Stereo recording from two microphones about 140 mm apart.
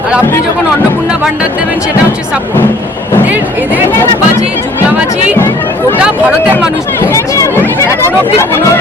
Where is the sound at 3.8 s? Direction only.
20° left (ahead or behind).